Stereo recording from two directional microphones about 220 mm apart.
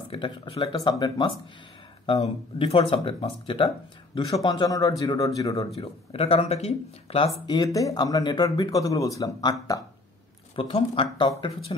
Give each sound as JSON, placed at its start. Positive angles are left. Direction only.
{"t": 0.1, "sound": "speech", "side_deg": 25}
{"t": 5.8, "sound": "speech", "side_deg": 25}